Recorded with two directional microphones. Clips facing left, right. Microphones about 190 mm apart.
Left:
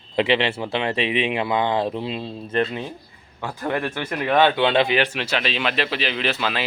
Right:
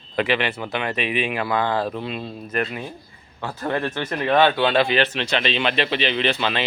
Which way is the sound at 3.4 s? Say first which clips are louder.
Even; 15° left (ahead or behind).